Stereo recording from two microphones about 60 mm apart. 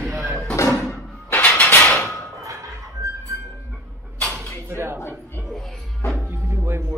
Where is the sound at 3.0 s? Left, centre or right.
Right.